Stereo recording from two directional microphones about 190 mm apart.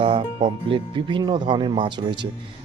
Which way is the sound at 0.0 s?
30° right (ahead or behind).